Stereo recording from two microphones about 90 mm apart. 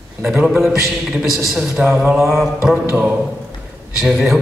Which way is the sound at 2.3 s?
5° right (ahead or behind).